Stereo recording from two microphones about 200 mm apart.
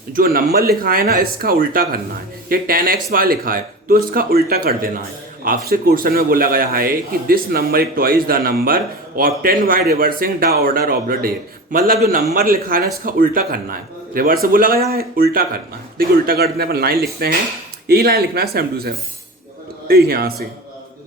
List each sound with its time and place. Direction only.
0.1 s a man's voice: 45° right (ahead or behind)